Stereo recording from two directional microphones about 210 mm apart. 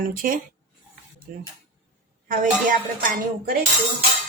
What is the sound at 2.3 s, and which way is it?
A woman's voice, 40° right (ahead or behind).